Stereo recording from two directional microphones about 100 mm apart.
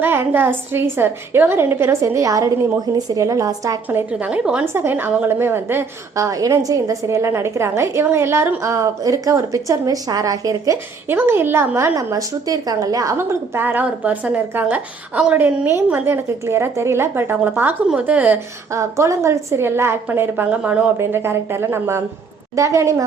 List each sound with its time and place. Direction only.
0.0 s a woman's voice: 20° right (ahead or behind)
3.8 s speech: 15° right (ahead or behind)
4.6 s a woman's voice: 25° right (ahead or behind)
11.1 s a woman's voice: 20° right (ahead or behind)
11.9 s a woman's voice: 35° right (ahead or behind)
13.1 s a woman's voice: 25° right (ahead or behind)
18.7 s a woman's voice: 30° right (ahead or behind); by 20.8 s 15° right (ahead or behind)
21.0 s a woman's voice: 25° right (ahead or behind)